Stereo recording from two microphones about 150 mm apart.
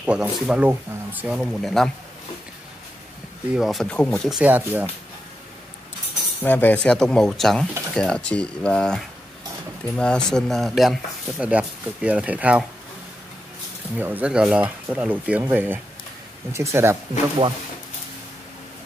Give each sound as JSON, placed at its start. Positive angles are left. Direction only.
{"t": 0.0, "sound": "speech", "side_deg": -10}
{"t": 3.5, "sound": "speech", "side_deg": 0}
{"t": 4.4, "sound": "speech", "side_deg": -10}
{"t": 6.4, "sound": "speech", "side_deg": 10}
{"t": 13.9, "sound": "speech", "side_deg": -10}
{"t": 17.4, "sound": "speech", "side_deg": -35}